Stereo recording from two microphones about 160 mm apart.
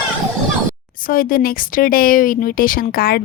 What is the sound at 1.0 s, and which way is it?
A woman's voice, 60° left (ahead or behind).